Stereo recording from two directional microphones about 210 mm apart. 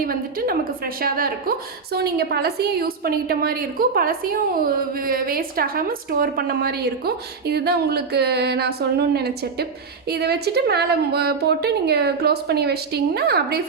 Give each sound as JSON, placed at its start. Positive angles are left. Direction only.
{"t": 0.0, "sound": "a woman's voice", "side_deg": -45}